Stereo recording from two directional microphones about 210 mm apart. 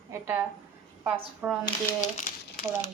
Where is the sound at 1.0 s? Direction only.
5° right (ahead or behind).